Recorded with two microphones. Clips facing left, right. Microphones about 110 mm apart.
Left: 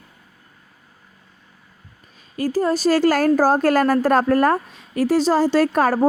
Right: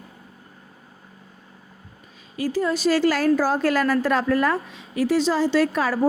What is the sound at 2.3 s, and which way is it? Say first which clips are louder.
A woman's voice: left 3 dB; 45° left (ahead or behind).